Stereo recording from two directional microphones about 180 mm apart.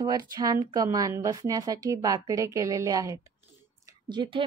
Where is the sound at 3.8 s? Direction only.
25° right (ahead or behind).